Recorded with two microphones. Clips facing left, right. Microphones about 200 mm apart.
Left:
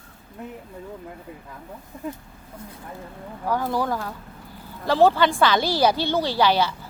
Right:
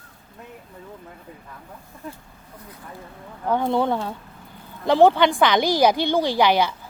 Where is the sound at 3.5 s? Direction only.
25° right (ahead or behind).